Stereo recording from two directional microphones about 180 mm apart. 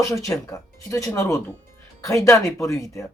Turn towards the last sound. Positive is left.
turn(degrees=15)  # may be behind; listen again after turning